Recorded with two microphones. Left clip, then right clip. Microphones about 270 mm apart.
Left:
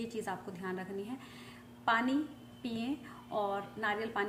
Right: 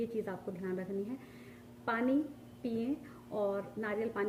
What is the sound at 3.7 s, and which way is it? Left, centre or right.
Speech, centre.